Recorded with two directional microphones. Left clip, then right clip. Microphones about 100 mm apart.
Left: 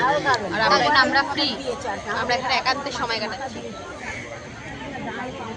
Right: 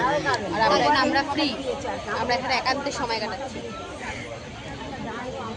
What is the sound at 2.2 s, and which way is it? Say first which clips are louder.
A woman's voice: left 2 dB; 25° right (ahead or behind).